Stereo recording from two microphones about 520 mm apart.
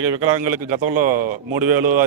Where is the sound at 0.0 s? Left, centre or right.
Right.